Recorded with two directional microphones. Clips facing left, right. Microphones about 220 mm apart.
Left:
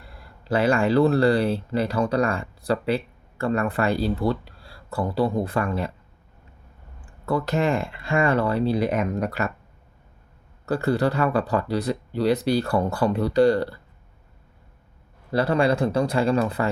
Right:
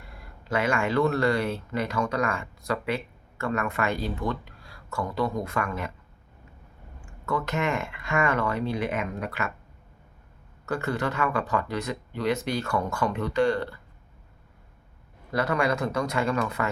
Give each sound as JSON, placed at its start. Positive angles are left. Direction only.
{"t": 0.0, "sound": "speech", "side_deg": 35}
{"t": 7.0, "sound": "speech", "side_deg": 35}
{"t": 10.7, "sound": "speech", "side_deg": 35}
{"t": 15.3, "sound": "speech", "side_deg": 30}